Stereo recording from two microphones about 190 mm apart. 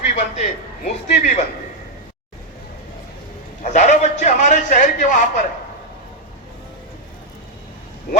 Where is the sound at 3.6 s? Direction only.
40° left (ahead or behind).